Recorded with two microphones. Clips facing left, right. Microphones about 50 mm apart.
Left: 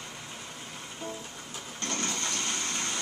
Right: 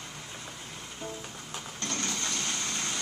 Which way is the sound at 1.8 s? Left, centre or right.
Centre.